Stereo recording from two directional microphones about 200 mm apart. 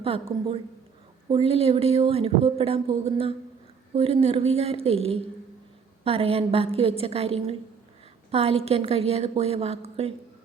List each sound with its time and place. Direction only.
1.3 s a woman's voice: 30° right (ahead or behind)